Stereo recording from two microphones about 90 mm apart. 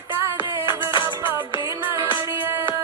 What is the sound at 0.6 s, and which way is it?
Music, 60° left (ahead or behind).